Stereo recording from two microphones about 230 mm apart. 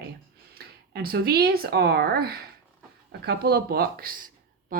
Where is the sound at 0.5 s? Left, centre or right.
Right.